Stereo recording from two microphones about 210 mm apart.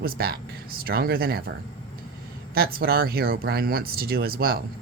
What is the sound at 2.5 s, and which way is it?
Speech, 45° right (ahead or behind).